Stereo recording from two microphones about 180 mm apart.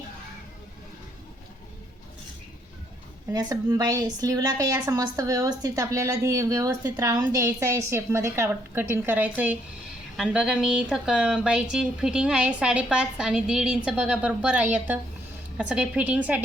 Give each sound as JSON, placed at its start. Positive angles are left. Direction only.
{"t": 3.3, "sound": "a woman's voice", "side_deg": -20}